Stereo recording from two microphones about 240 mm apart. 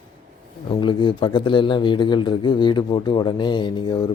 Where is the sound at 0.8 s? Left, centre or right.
Centre.